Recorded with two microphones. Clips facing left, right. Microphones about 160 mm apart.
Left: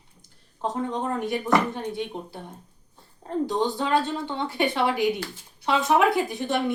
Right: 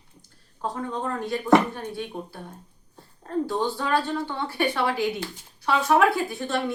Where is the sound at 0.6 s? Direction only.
20° left (ahead or behind).